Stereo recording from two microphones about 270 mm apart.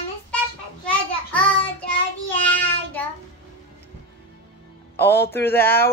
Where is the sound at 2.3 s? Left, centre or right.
Centre.